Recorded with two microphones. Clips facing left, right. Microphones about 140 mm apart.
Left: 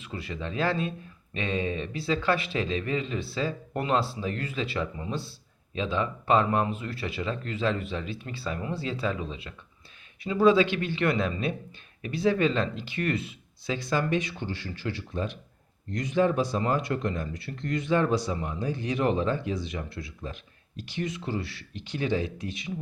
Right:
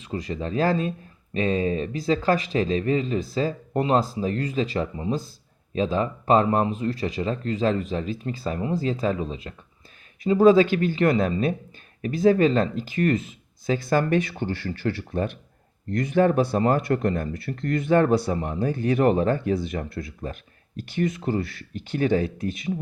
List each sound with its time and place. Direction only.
0.0 s speech: 35° right (ahead or behind)